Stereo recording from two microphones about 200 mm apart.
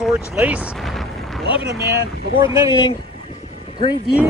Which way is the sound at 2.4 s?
15° right (ahead or behind).